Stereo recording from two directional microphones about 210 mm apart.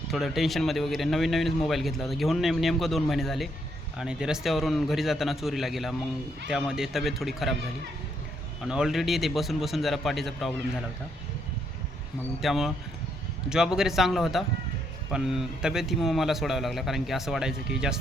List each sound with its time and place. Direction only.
0.1 s speech: centre (ahead or behind)
8.6 s speech: 5° right (ahead or behind)
12.4 s speech: centre (ahead or behind)